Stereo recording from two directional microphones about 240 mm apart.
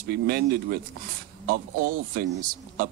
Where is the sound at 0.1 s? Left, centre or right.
Right.